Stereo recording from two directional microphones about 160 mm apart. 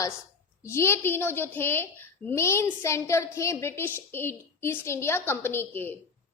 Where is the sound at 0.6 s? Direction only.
15° left (ahead or behind).